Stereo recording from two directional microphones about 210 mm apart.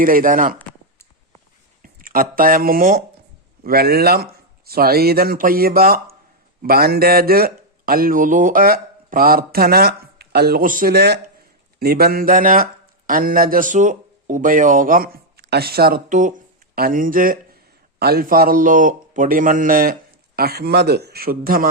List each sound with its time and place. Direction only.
0.0 s speech: 40° right (ahead or behind)
1.8 s a man's voice: 40° right (ahead or behind)